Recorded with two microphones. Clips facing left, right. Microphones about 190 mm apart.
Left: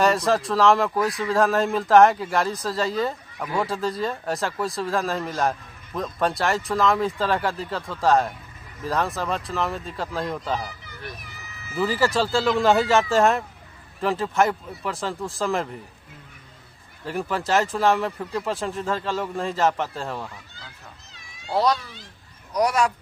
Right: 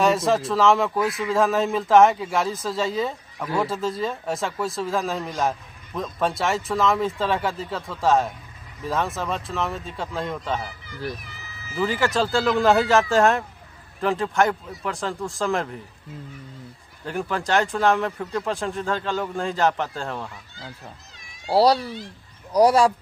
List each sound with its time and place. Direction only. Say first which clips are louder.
0.0 s speech: even; centre (ahead or behind)
11.8 s speech: even; centre (ahead or behind)
17.1 s speech: even; centre (ahead or behind)
21.5 s speech: right 4 dB; 30° right (ahead or behind)